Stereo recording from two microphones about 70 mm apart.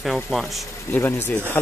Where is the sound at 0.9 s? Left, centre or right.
Left.